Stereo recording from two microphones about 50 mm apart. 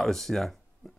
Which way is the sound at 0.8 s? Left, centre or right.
Centre.